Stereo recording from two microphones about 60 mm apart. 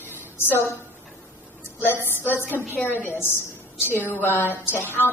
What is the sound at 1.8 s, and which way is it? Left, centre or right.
A woman's voice, left.